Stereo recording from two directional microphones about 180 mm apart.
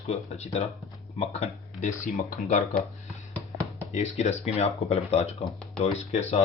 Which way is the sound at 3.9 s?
35° left (ahead or behind).